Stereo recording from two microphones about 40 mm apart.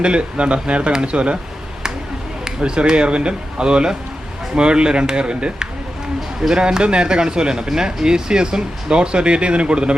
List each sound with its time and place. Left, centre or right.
0.0 s speech: right
2.6 s speech: right